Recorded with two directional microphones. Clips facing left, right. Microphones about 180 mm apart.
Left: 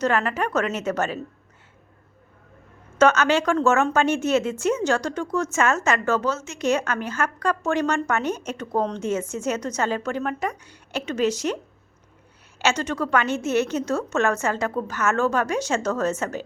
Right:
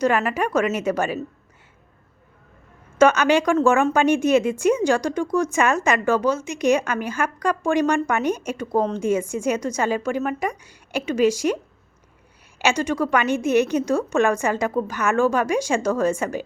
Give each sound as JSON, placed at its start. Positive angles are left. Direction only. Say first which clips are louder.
{"t": 0.0, "sound": "a woman's voice", "louder": "right 2 dB", "side_deg": -10}
{"t": 3.0, "sound": "a woman's voice", "louder": "right 2 dB", "side_deg": -15}